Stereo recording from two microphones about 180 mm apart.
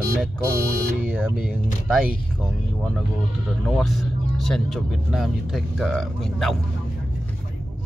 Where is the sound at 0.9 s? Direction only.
5° right (ahead or behind).